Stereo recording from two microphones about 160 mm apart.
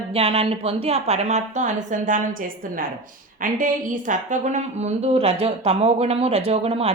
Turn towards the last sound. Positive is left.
turn(degrees=-35)  # may be behind; listen again after turning